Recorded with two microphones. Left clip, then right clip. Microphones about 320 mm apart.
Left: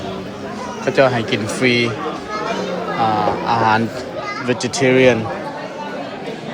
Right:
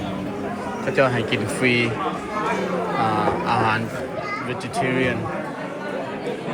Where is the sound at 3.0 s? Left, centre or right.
Centre.